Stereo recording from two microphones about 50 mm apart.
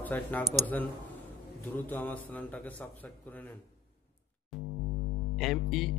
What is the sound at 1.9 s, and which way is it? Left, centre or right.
Speech, left.